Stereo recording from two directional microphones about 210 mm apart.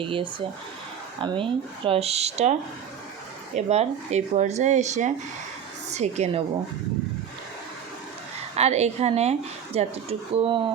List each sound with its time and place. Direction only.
0.0 s speech: 25° right (ahead or behind)
8.5 s speech: 30° right (ahead or behind)